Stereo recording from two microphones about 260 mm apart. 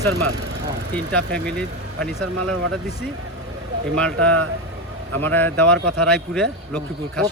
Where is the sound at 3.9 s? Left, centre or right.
Centre.